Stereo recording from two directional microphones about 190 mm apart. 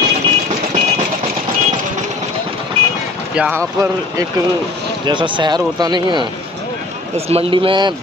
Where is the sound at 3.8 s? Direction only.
15° right (ahead or behind).